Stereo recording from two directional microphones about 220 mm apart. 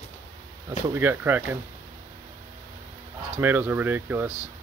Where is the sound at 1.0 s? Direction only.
10° right (ahead or behind).